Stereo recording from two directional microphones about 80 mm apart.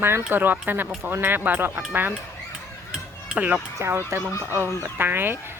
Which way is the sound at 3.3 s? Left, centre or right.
Centre.